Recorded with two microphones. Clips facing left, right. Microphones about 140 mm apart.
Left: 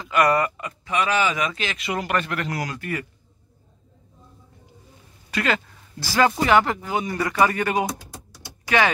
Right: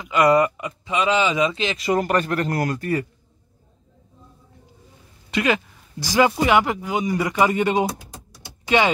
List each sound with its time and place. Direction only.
0.0 s speech: 20° right (ahead or behind)
1.8 s speech: 40° right (ahead or behind)
5.3 s speech: 15° right (ahead or behind)